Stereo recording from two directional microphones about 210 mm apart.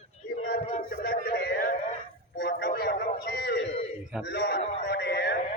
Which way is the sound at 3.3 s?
55° left (ahead or behind).